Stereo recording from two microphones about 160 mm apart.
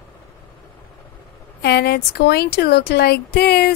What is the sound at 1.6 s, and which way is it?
Speech, 90° left.